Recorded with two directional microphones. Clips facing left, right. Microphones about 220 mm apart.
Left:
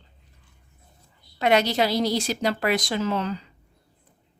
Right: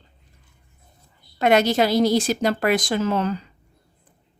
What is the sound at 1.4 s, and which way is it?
A woman's voice, 50° right (ahead or behind).